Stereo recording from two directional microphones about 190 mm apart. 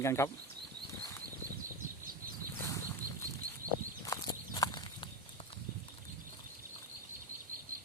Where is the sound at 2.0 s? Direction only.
50° right (ahead or behind).